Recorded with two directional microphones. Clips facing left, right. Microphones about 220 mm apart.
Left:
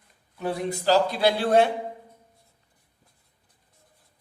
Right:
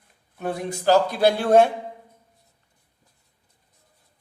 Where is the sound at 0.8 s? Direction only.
50° right (ahead or behind).